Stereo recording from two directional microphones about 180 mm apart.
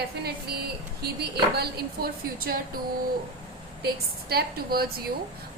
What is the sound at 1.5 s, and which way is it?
A woman's voice, 60° right (ahead or behind).